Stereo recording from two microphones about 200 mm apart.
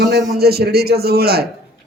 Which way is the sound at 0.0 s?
55° right (ahead or behind).